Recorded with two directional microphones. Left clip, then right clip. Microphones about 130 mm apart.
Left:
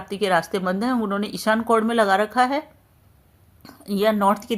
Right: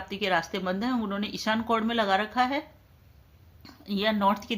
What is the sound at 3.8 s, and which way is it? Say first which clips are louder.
Speech: left 6 dB; 45° left (ahead or behind).